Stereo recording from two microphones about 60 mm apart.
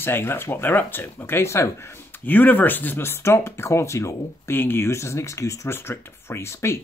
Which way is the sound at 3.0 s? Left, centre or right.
Left.